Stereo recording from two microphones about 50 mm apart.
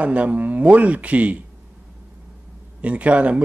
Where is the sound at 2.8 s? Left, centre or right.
Right.